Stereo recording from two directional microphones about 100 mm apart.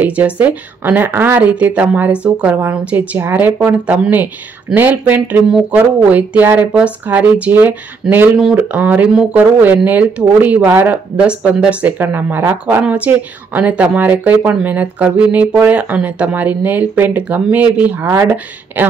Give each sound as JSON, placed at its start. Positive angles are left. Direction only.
{"t": 0.0, "sound": "a woman's voice", "side_deg": -15}
{"t": 8.8, "sound": "speech", "side_deg": -15}